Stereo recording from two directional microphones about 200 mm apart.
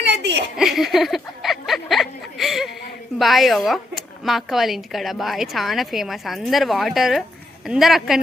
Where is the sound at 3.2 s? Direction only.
Centre (ahead or behind).